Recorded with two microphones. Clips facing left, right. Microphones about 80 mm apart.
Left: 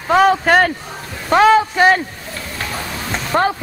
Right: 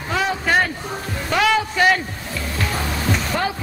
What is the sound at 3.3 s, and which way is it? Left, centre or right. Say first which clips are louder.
Speech: left 9 dB; left.